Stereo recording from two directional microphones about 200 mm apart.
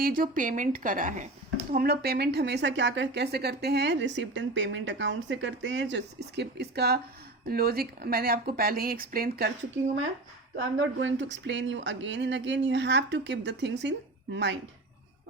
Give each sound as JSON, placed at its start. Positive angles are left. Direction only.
{"t": 0.0, "sound": "a woman's voice", "side_deg": -45}
{"t": 1.7, "sound": "a woman's voice", "side_deg": -50}
{"t": 10.5, "sound": "a woman's voice", "side_deg": -70}